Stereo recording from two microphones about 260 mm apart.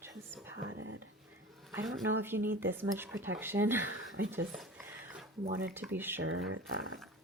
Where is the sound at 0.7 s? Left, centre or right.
Right.